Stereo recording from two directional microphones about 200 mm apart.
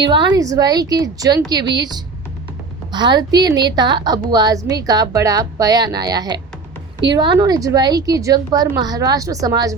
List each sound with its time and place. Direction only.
0.0 s a woman's voice: 20° right (ahead or behind)